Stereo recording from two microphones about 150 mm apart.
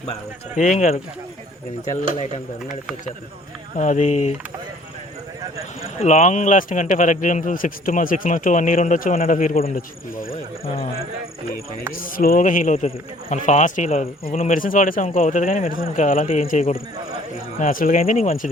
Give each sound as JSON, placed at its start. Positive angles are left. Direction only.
{"t": 0.5, "sound": "speech", "side_deg": 55}
{"t": 3.8, "sound": "speech", "side_deg": 55}
{"t": 5.8, "sound": "speech", "side_deg": 45}
{"t": 9.7, "sound": "speech", "side_deg": 70}
{"t": 11.9, "sound": "speech", "side_deg": 70}
{"t": 18.2, "sound": "speech", "side_deg": 55}